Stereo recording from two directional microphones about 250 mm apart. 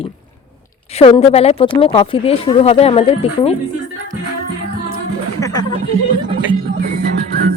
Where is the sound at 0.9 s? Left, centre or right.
Left.